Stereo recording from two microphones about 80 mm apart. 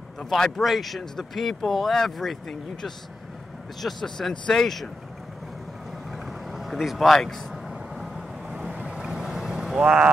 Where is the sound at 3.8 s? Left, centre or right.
Centre.